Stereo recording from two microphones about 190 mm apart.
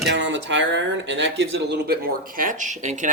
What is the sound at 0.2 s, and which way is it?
Speech, 70° right (ahead or behind).